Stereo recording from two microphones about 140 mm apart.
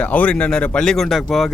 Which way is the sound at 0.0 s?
10° left (ahead or behind).